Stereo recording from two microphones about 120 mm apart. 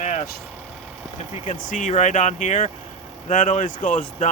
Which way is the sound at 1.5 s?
90° left.